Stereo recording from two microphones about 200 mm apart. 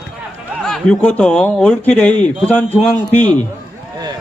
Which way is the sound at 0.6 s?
5° left (ahead or behind).